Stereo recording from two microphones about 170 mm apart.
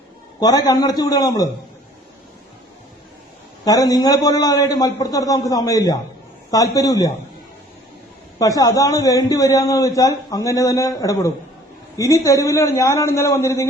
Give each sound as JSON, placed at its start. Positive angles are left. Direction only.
{"t": 0.3, "sound": "a man's voice", "side_deg": 20}
{"t": 3.6, "sound": "a man's voice", "side_deg": 20}
{"t": 8.4, "sound": "a man's voice", "side_deg": 20}